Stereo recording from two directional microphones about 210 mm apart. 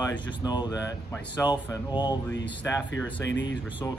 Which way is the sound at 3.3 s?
60° left (ahead or behind).